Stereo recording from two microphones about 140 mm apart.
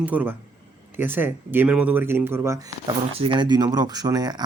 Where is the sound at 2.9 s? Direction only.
40° right (ahead or behind).